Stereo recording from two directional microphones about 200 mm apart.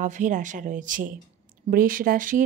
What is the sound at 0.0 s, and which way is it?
A woman's voice, 40° right (ahead or behind).